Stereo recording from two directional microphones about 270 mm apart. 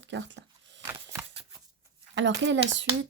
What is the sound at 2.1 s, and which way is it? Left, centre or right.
Speech, right.